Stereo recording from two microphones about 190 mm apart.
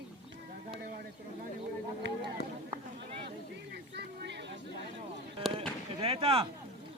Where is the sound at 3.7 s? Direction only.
60° right (ahead or behind).